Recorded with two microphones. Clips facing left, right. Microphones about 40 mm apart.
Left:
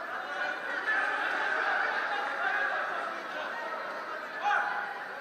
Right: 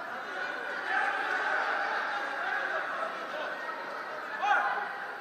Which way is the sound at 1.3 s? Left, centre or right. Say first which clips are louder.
Even; centre.